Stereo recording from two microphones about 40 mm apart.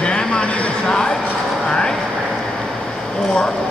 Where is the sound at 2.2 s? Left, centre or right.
Centre.